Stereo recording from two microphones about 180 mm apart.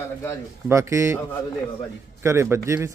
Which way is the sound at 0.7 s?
15° right (ahead or behind).